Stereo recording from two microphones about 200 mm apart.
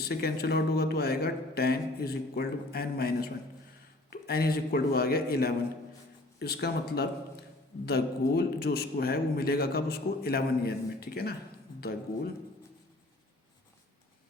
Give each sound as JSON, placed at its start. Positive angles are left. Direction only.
{"t": 0.0, "sound": "a man's voice", "side_deg": 50}